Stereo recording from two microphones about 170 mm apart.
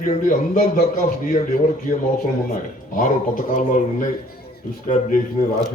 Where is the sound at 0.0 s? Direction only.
50° left (ahead or behind).